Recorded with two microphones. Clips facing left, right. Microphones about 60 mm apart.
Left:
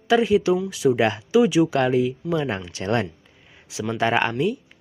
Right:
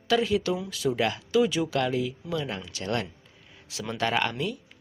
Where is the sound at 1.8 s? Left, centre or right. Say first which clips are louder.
Left 7 dB; left.